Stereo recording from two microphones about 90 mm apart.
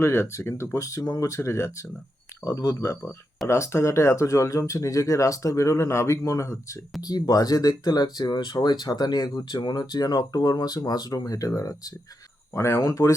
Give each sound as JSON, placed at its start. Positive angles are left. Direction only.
{"t": 0.0, "sound": "speech", "side_deg": 30}
{"t": 7.0, "sound": "speech", "side_deg": 45}